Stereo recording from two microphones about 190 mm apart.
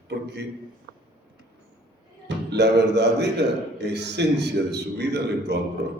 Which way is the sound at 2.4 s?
60° right (ahead or behind).